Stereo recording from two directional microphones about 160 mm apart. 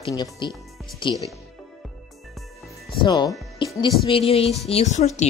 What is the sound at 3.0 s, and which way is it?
Music, 25° left (ahead or behind).